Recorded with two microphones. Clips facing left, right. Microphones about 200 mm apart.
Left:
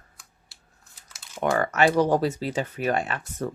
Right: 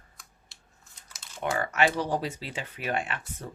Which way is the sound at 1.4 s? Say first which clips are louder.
Left 6 dB; 65° left (ahead or behind).